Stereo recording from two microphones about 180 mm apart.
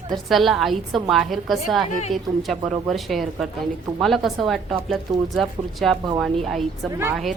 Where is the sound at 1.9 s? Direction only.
40° left (ahead or behind).